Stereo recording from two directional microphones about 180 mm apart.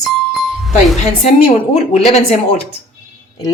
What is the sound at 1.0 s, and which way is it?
A woman's voice, 35° left (ahead or behind).